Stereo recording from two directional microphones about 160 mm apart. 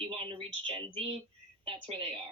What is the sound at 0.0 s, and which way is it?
Speech, 35° right (ahead or behind).